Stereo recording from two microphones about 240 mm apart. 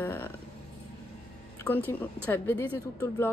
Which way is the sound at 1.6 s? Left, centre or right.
Centre.